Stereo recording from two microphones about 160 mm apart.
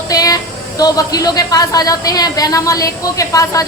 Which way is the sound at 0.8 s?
25° left (ahead or behind).